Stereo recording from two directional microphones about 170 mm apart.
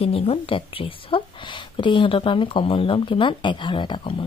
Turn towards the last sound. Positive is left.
turn(degrees=30)  # may be behind; listen again after turning